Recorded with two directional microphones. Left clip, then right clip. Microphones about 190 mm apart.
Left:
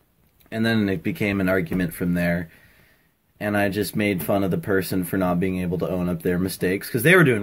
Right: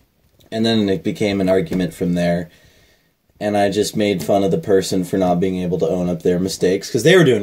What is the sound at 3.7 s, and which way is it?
Speech, 5° right (ahead or behind).